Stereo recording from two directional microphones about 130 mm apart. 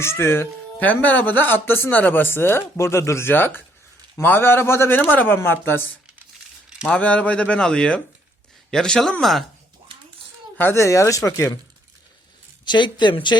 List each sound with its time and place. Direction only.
0.0 s speech: 20° left (ahead or behind)
6.8 s speech: 10° left (ahead or behind)
10.6 s speech: 20° left (ahead or behind)
12.6 s speech: 35° left (ahead or behind)